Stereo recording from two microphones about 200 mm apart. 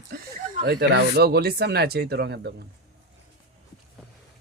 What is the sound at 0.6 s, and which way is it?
A woman's voice, 55° right (ahead or behind).